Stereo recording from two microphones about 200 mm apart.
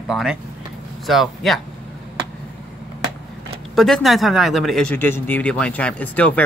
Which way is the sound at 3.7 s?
Centre (ahead or behind).